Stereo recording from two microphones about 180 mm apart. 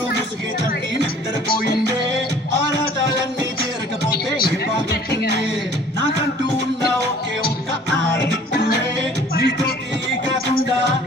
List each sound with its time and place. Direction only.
1.5 s music: 55° left (ahead or behind)
9.3 s music: 65° left (ahead or behind)